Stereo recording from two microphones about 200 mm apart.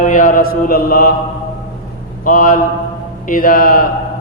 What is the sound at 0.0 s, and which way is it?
A man's voice, 40° left (ahead or behind).